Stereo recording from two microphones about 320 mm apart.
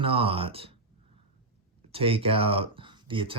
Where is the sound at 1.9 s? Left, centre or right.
Centre.